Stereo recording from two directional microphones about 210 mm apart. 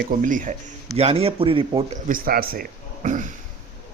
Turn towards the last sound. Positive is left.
turn(degrees=-35)  # may be behind; listen again after turning